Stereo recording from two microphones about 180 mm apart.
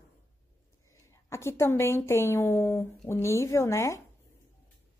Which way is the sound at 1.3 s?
15° left (ahead or behind).